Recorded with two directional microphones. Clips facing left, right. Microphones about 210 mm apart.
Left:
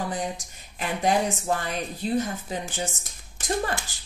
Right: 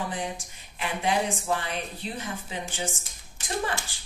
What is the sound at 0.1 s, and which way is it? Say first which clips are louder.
Speech: left 3 dB; 40° left (ahead or behind).